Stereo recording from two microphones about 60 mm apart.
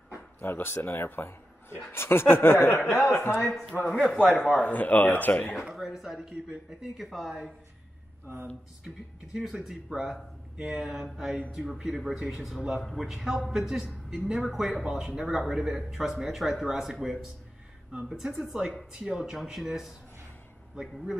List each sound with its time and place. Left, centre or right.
0.4 s speech: left
3.8 s a man's voice: centre
4.6 s speech: left
5.8 s a man's voice: centre
8.8 s a man's voice: centre
19.3 s a man's voice: centre